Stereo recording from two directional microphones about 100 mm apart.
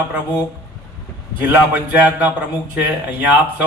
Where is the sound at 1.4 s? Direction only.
15° right (ahead or behind).